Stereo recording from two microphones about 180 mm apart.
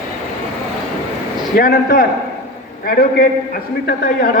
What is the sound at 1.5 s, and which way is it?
A man's voice, 50° left (ahead or behind).